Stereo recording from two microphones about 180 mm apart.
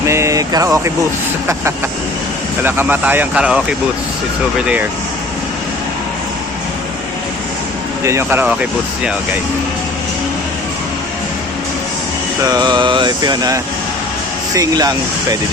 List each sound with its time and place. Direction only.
0.0 s a sound: 15° right (ahead or behind)
2.6 s speech: 10° right (ahead or behind)
4.6 s speech: 5° right (ahead or behind)
8.0 s speech: 15° right (ahead or behind)
12.4 s mantra: 20° right (ahead or behind)